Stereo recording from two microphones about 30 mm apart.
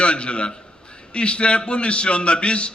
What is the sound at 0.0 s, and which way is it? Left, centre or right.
A man's voice, left.